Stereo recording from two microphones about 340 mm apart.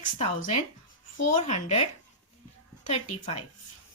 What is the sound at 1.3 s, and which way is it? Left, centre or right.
Speech, left.